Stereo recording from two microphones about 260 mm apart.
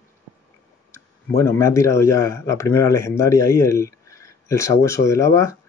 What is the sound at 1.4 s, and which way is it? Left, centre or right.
Speech, centre.